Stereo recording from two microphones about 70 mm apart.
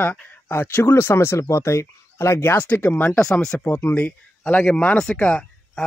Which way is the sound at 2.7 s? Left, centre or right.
Left.